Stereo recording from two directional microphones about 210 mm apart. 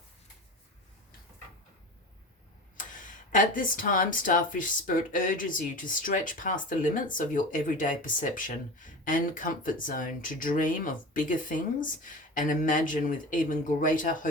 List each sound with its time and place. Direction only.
2.7 s speech: 40° left (ahead or behind)